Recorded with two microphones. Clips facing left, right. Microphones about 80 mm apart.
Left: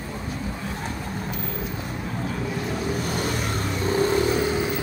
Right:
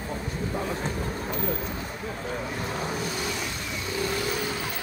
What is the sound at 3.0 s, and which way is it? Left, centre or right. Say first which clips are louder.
Vehicle: left 4 dB; left.